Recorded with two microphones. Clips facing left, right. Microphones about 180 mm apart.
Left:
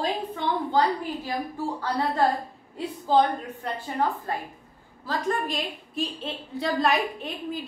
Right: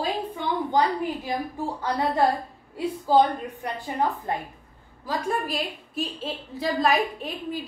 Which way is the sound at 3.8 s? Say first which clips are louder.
Right 1 dB; 20° right (ahead or behind).